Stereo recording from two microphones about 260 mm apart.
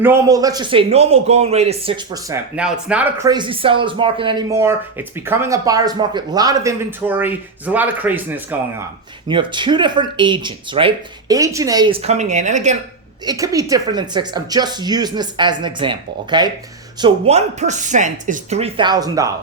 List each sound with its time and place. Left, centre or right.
0.0 s speech: centre
9.2 s speech: centre
13.2 s speech: centre